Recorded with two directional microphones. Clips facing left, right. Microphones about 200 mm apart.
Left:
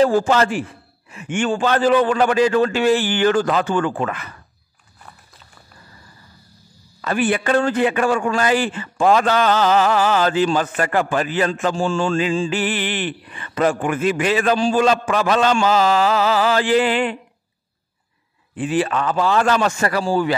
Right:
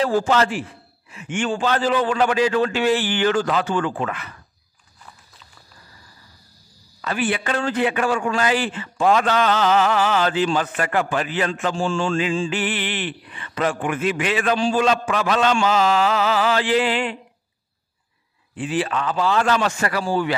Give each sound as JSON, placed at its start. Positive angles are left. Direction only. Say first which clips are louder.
{"t": 0.0, "sound": "a man's voice", "louder": "left 3 dB", "side_deg": 45}
{"t": 7.0, "sound": "a man's voice", "louder": "left 4 dB", "side_deg": 45}
{"t": 18.5, "sound": "a man's voice", "louder": "left 3 dB", "side_deg": 50}